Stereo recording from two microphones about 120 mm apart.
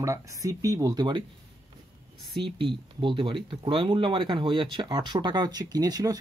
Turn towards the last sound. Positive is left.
turn(degrees=-30)  # may be behind; listen again after turning